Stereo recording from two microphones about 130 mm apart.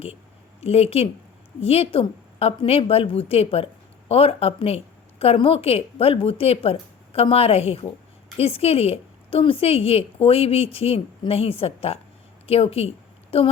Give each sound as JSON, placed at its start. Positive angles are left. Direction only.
{"t": 0.6, "sound": "a woman's voice", "side_deg": 50}